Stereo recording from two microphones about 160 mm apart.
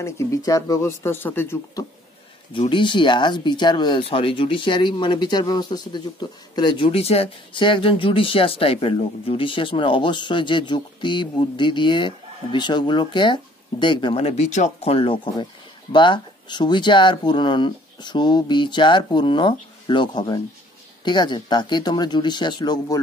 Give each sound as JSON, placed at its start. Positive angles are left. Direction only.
{"t": 0.0, "sound": "speech", "side_deg": 20}
{"t": 2.7, "sound": "speech", "side_deg": 30}